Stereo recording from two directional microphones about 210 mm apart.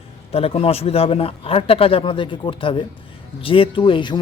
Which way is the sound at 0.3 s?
30° left (ahead or behind).